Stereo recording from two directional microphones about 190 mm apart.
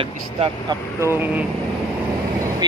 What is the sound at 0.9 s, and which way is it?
Speech, 10° right (ahead or behind).